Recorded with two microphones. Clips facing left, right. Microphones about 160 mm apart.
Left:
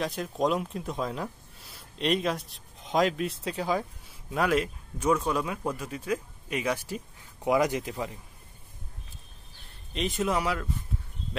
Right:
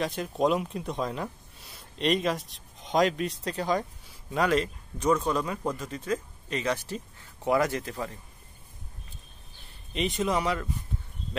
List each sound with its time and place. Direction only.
0.0 s speech: centre (ahead or behind)
9.9 s speech: centre (ahead or behind)